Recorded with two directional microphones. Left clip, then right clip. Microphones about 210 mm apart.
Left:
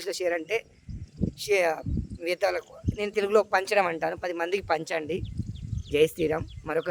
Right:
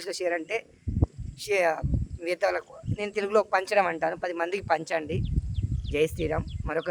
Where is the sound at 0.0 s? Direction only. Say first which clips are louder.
Left 1 dB; 15° left (ahead or behind).